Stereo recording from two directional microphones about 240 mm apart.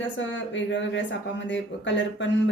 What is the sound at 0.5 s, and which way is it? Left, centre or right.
Speech, left.